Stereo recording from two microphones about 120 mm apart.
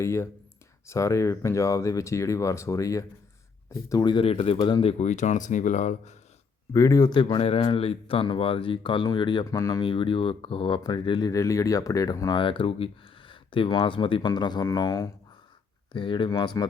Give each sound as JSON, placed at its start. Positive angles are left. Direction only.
{"t": 0.0, "sound": "speech", "side_deg": 20}
{"t": 6.7, "sound": "speech", "side_deg": 30}
{"t": 9.8, "sound": "speech", "side_deg": 45}
{"t": 12.4, "sound": "speech", "side_deg": 45}
{"t": 15.9, "sound": "speech", "side_deg": 45}